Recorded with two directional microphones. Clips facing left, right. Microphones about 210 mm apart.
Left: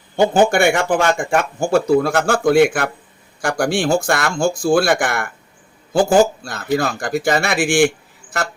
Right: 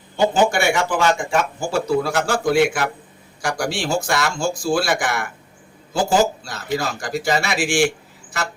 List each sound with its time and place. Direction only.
0.2 s a man's voice: 55° left (ahead or behind)